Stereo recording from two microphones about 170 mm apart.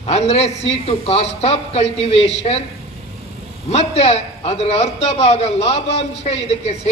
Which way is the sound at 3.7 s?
35° left (ahead or behind).